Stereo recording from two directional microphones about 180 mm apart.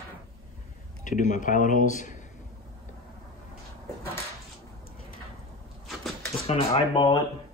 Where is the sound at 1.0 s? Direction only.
45° left (ahead or behind).